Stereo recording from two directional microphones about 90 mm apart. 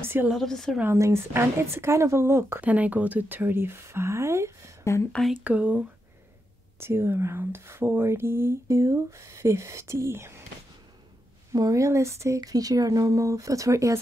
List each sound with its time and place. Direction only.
0.0 s a sound: 25° right (ahead or behind)
0.3 s speech: 5° left (ahead or behind)
0.8 s speech: 30° right (ahead or behind)
2.6 s speech: 15° right (ahead or behind); by 4.7 s 30° right (ahead or behind)
5.3 s speech: 15° right (ahead or behind)
6.8 s speech: 25° right (ahead or behind)
11.5 s speech: 40° right (ahead or behind)